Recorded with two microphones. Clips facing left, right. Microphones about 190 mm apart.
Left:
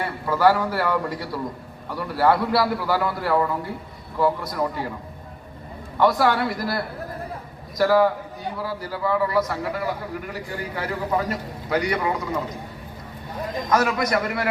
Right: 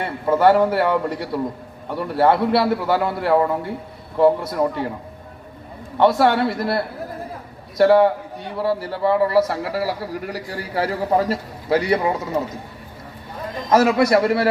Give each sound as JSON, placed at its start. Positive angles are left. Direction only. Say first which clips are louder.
{"t": 0.0, "sound": "a man's voice", "louder": "right 3 dB", "side_deg": -25}
{"t": 6.0, "sound": "a man's voice", "louder": "right 4 dB", "side_deg": -25}
{"t": 13.7, "sound": "a man's voice", "louder": "right 7 dB", "side_deg": -25}